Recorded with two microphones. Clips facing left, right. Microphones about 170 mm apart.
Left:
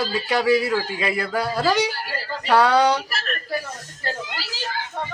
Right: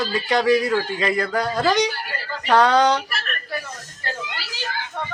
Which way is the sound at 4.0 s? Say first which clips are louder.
Left 2 dB; 35° left (ahead or behind).